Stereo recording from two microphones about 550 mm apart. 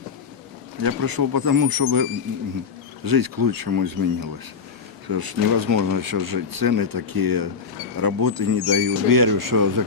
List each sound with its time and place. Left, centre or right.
0.8 s speech: right